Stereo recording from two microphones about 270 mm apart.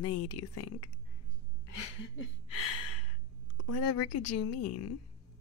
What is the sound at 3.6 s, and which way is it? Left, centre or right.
Speech, left.